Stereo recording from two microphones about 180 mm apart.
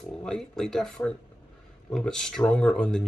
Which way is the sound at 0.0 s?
5° left (ahead or behind).